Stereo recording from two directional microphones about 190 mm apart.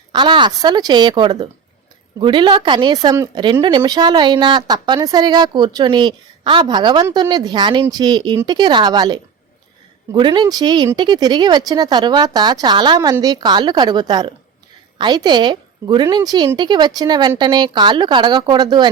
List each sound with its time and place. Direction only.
0.1 s speech: 25° right (ahead or behind)